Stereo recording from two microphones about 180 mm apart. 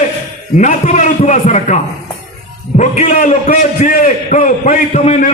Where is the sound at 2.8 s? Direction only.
40° left (ahead or behind).